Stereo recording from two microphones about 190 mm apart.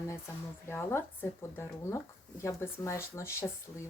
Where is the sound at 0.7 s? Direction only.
15° left (ahead or behind).